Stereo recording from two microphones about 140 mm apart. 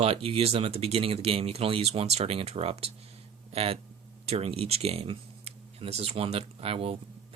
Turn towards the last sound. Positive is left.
turn(degrees=-45)  # may be behind; listen again after turning